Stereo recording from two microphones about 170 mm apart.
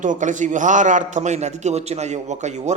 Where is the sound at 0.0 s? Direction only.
50° right (ahead or behind).